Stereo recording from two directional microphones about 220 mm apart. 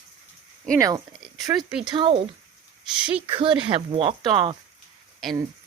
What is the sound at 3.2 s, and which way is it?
Speech, 25° right (ahead or behind).